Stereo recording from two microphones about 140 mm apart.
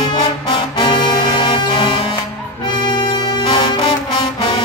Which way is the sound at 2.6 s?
30° left (ahead or behind).